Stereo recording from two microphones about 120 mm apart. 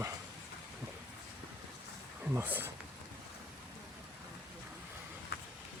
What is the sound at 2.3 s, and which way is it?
Speech, 20° right (ahead or behind).